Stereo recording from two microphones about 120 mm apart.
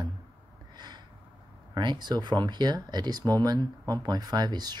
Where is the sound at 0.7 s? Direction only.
35° right (ahead or behind).